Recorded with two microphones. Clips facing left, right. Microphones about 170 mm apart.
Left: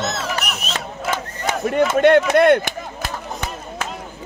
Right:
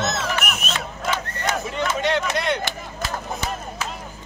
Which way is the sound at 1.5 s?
55° left (ahead or behind).